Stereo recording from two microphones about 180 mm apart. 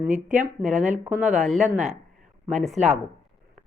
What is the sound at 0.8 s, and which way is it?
Speech, 45° right (ahead or behind).